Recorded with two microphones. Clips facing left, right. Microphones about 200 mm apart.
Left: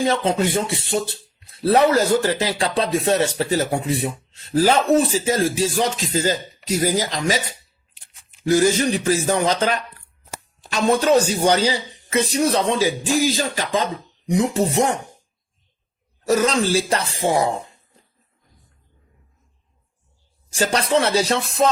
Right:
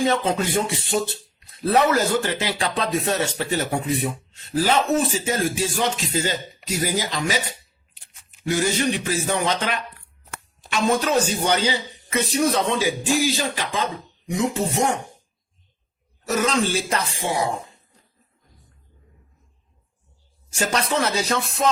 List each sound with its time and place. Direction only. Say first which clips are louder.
0.0 s speech: left 2 dB; 30° left (ahead or behind)
16.2 s speech: left 3 dB; 35° left (ahead or behind)
20.5 s speech: left 4 dB; 30° left (ahead or behind)